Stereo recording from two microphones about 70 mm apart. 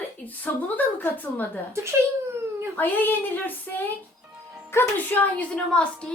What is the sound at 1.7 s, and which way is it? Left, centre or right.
Speech, right.